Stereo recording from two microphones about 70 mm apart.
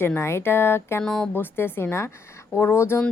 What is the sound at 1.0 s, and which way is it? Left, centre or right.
Speech, centre.